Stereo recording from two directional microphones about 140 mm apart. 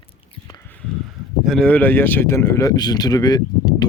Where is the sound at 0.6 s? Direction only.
5° left (ahead or behind).